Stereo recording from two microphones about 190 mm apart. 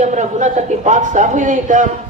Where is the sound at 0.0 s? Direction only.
40° right (ahead or behind).